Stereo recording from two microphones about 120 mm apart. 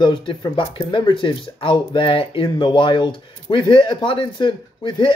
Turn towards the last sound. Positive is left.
turn(degrees=40)  # may be behind; listen again after turning